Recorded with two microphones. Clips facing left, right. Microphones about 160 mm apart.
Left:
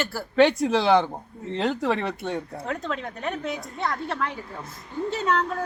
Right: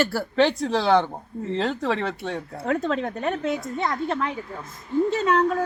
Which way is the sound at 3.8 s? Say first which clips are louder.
Right 1 dB; 20° right (ahead or behind).